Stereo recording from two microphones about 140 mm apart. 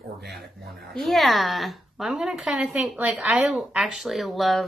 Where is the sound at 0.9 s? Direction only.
Centre (ahead or behind).